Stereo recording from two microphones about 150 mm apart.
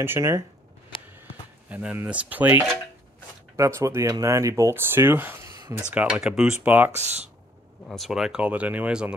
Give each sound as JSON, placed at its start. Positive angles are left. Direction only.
{"t": 0.0, "sound": "speech", "side_deg": -15}
{"t": 1.7, "sound": "speech", "side_deg": -10}
{"t": 6.9, "sound": "speech", "side_deg": -50}
{"t": 7.9, "sound": "speech", "side_deg": 0}